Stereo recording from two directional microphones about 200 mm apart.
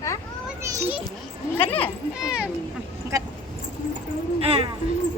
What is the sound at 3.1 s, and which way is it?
Speech, 15° right (ahead or behind).